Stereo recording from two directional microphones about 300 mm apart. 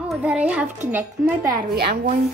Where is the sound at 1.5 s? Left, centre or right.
Right.